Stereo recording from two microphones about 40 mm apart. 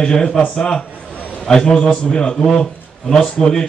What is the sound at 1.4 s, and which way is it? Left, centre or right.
A man's voice, centre.